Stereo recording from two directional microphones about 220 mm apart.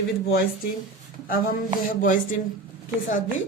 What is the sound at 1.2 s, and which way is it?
Speech, 40° left (ahead or behind).